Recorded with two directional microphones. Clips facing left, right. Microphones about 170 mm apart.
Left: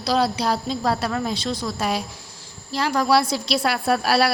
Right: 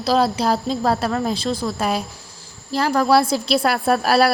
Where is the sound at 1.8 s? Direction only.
50° right (ahead or behind).